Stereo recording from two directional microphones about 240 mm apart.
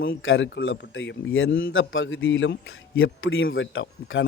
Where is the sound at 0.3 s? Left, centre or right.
Left.